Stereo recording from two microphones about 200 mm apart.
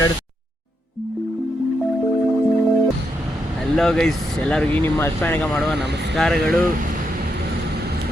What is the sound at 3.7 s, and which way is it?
Speech, 5° left (ahead or behind).